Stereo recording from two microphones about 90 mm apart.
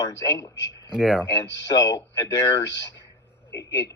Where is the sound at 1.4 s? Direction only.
50° left (ahead or behind).